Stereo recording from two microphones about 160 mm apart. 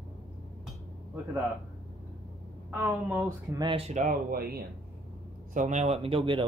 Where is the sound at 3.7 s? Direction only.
40° right (ahead or behind).